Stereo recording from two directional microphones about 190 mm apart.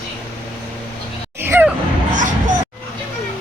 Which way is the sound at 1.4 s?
10° right (ahead or behind).